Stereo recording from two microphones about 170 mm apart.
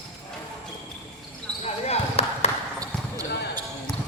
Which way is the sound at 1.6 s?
40° left (ahead or behind).